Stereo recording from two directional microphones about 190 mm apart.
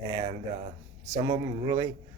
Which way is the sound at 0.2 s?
35° right (ahead or behind).